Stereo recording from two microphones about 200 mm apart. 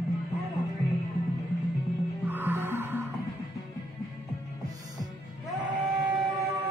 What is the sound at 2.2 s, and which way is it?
Music, 10° right (ahead or behind).